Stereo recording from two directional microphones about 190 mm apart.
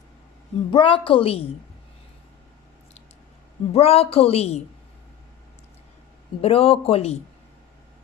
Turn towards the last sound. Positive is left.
turn(degrees=30)  # may be behind; listen again after turning